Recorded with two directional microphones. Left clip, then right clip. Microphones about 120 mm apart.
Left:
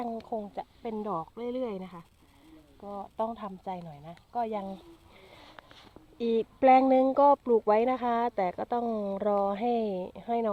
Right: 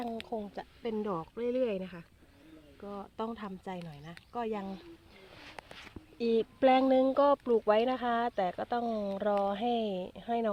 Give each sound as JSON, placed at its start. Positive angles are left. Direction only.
{"t": 0.0, "sound": "a sound", "side_deg": 20}
{"t": 0.5, "sound": "speech", "side_deg": 5}
{"t": 3.4, "sound": "speech", "side_deg": 20}
{"t": 6.1, "sound": "speech", "side_deg": 20}